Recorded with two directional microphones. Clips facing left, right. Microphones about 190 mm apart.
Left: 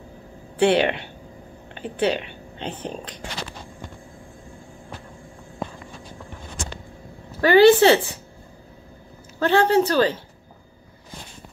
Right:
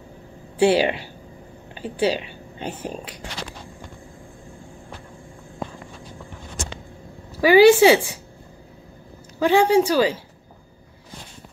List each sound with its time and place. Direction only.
0.6 s speech: 10° right (ahead or behind)
7.3 s speech: 10° right (ahead or behind)
9.4 s speech: 10° right (ahead or behind)